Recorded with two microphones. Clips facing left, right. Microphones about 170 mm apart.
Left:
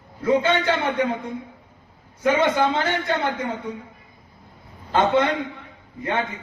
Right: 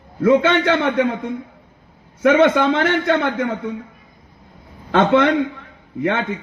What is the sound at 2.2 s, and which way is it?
A man's voice, 70° right (ahead or behind).